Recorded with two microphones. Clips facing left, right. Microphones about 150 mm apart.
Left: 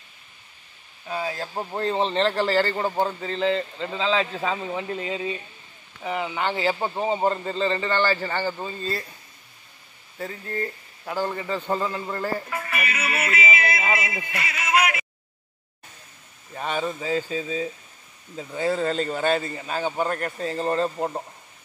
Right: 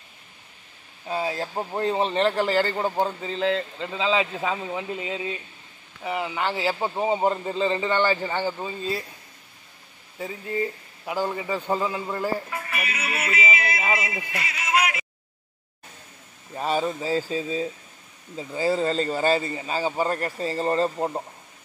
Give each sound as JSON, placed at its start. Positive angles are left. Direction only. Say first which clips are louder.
{"t": 1.0, "sound": "speech", "louder": "right 2 dB", "side_deg": -25}
{"t": 1.5, "sound": "a man's voice", "louder": "right 1 dB", "side_deg": -10}
{"t": 10.1, "sound": "speech", "louder": "right 2 dB", "side_deg": -10}
{"t": 12.5, "sound": "music", "louder": "left 2 dB", "side_deg": 70}
{"t": 13.7, "sound": "speech", "louder": "even", "side_deg": 0}
{"t": 14.3, "sound": "music", "louder": "left 2 dB", "side_deg": 65}
{"t": 16.5, "sound": "speech", "louder": "right 2 dB", "side_deg": -35}
{"t": 18.3, "sound": "a man's voice", "louder": "right 1 dB", "side_deg": -5}